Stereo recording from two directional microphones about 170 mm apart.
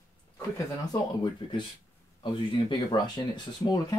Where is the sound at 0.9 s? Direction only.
25° left (ahead or behind).